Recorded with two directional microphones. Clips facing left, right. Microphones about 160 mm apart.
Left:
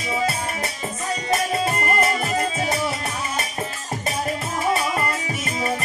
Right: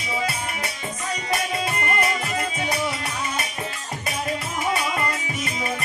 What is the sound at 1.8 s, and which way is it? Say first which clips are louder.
Music: left 3 dB; 40° left (ahead or behind).